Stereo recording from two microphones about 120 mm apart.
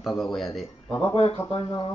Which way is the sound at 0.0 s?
Centre (ahead or behind).